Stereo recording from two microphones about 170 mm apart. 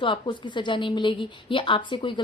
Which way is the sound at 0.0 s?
30° left (ahead or behind).